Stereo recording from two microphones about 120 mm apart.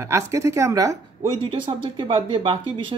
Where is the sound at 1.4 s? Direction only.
45° right (ahead or behind).